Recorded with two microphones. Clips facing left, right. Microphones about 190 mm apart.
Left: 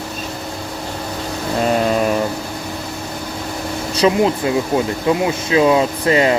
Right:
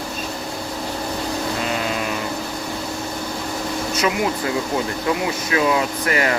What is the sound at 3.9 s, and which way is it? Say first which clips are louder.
Speech: left 8 dB; 30° left (ahead or behind).